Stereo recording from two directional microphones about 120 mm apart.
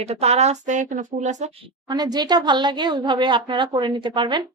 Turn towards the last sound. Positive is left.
turn(degrees=-40)  # may be behind; listen again after turning